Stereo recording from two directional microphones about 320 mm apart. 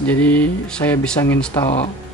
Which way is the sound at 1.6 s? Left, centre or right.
Centre.